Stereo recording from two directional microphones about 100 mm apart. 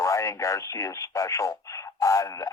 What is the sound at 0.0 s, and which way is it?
Speech, 30° left (ahead or behind).